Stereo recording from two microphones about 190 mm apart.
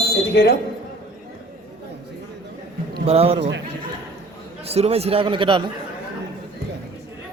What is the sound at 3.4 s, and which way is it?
Speech, 70° right (ahead or behind).